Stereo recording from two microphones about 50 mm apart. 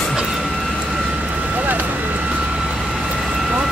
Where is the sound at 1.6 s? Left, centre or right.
Right.